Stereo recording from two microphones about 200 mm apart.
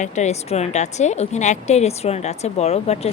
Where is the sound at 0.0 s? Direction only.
35° left (ahead or behind).